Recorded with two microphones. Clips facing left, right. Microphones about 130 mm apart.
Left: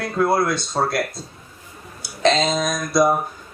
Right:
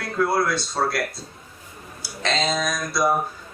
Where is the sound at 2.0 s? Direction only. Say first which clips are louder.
Left 7 dB; 20° left (ahead or behind).